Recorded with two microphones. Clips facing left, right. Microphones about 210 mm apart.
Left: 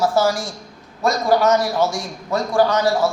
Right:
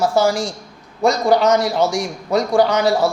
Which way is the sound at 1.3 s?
15° right (ahead or behind).